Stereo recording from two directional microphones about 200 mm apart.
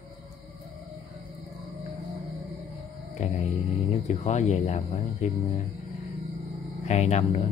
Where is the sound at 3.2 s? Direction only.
35° left (ahead or behind).